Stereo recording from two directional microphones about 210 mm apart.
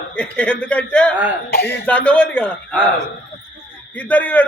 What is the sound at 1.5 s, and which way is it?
Speech, 50° left (ahead or behind).